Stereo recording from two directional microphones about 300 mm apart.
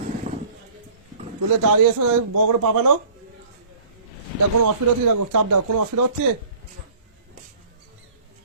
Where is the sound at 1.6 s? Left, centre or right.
Right.